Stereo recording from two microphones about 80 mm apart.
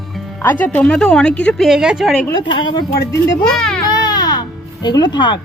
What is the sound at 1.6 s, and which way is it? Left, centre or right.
Speech, centre.